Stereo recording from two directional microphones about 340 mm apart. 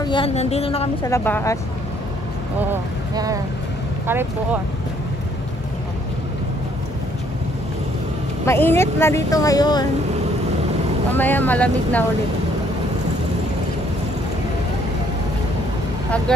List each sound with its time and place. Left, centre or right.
0.0 s a woman's voice: centre
2.7 s speech: centre
8.5 s a woman's voice: centre
11.1 s speech: centre